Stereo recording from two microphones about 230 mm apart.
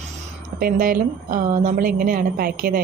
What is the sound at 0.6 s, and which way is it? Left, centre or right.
A woman's voice, right.